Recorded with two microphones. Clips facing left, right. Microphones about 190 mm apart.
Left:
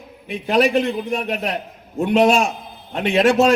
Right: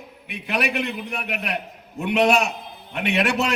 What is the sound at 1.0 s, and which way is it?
Speech, 30° left (ahead or behind).